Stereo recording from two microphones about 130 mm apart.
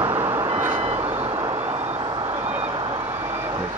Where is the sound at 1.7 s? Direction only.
40° right (ahead or behind).